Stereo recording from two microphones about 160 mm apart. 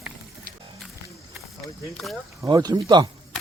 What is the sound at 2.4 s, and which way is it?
Speech, 25° right (ahead or behind).